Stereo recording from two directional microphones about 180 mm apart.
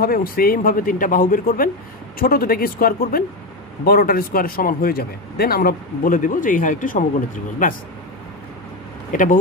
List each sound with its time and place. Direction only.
0.0 s speech: 55° left (ahead or behind)
9.1 s speech: 50° left (ahead or behind)